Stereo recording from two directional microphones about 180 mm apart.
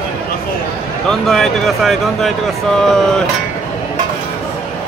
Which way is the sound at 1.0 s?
Centre (ahead or behind).